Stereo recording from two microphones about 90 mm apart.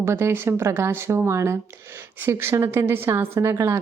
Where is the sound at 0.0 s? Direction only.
30° right (ahead or behind).